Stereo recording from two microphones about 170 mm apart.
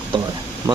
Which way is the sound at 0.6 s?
20° right (ahead or behind).